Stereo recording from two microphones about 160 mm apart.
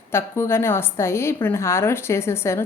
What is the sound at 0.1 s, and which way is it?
Speech, 15° left (ahead or behind).